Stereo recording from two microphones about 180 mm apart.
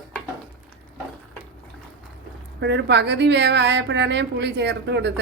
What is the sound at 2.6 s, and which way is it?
A woman's voice, 75° right (ahead or behind).